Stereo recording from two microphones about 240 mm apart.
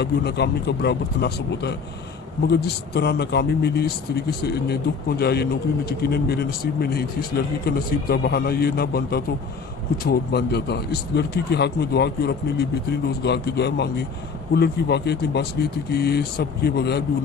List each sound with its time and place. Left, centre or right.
0.0 s a man's voice: left
10.3 s speech: left